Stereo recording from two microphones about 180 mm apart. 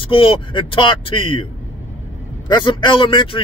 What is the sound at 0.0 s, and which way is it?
Speech, 30° left (ahead or behind).